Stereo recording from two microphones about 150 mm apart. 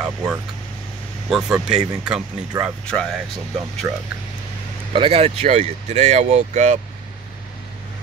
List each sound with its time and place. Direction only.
0.0 s speech: 5° right (ahead or behind)
2.9 s speech: 5° left (ahead or behind)
4.9 s speech: 40° right (ahead or behind)